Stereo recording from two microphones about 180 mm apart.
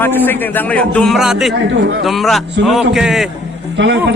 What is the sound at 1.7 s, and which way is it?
Speech, 65° right (ahead or behind).